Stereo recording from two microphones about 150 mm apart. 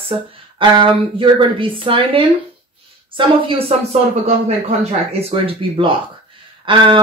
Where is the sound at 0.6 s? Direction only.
35° right (ahead or behind).